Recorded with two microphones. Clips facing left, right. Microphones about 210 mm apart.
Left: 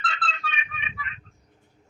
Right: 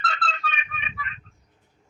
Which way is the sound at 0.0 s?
40° right (ahead or behind).